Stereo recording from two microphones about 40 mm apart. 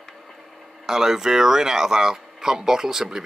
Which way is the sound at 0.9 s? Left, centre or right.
Centre.